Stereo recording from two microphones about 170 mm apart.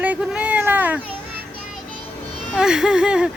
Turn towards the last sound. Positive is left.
turn(degrees=-5)  # may be behind; listen again after turning